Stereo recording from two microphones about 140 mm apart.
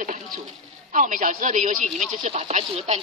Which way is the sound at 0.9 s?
70° right (ahead or behind).